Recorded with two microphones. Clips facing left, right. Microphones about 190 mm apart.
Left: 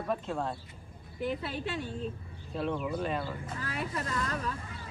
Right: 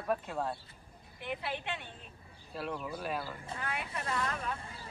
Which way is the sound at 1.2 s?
35° left (ahead or behind).